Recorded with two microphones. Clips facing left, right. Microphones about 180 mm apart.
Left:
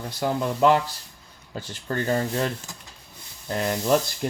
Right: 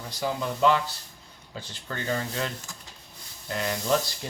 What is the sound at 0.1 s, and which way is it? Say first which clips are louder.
Speech: left 4 dB; 55° left (ahead or behind).